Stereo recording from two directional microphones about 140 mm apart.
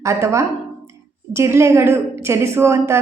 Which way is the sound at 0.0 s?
20° right (ahead or behind).